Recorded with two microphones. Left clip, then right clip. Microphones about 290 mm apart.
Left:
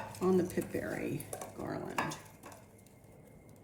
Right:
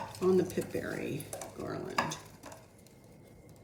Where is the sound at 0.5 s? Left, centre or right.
Left.